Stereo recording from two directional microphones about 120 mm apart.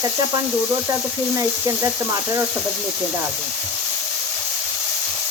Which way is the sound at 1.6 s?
25° right (ahead or behind).